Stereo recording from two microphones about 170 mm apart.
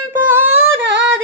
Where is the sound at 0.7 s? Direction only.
90° right.